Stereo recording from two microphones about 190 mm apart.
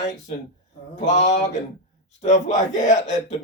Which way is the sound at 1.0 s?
40° left (ahead or behind).